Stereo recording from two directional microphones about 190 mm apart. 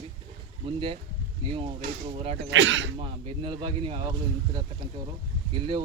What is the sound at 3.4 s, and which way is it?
Speech, 25° right (ahead or behind).